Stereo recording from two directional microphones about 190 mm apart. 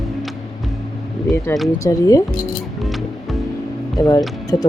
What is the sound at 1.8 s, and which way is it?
Speech, 15° left (ahead or behind).